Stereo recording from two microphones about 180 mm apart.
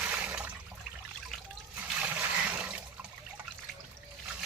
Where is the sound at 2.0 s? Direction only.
10° right (ahead or behind).